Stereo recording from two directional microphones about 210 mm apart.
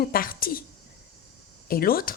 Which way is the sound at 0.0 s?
45° left (ahead or behind).